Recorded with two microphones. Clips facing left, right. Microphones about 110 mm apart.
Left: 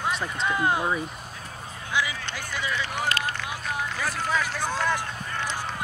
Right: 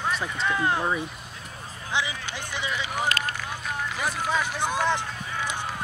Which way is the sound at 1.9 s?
25° right (ahead or behind).